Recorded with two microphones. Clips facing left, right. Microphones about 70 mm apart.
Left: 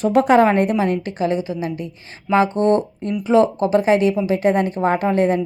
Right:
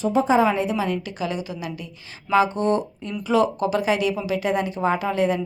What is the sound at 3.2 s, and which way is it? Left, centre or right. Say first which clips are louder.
A woman's voice: left 5 dB; left.